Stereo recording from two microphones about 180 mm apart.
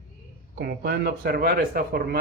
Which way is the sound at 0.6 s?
60° right (ahead or behind).